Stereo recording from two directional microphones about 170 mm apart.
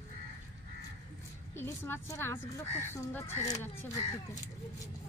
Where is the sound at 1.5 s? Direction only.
15° left (ahead or behind).